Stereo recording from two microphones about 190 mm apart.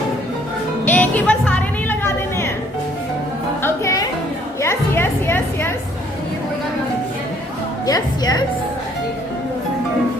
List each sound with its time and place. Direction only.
0.9 s music: 10° left (ahead or behind)
3.6 s music: 15° left (ahead or behind)
7.9 s music: 20° left (ahead or behind)